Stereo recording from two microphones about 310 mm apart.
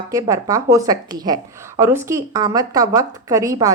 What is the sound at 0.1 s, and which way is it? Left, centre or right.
Speech, centre.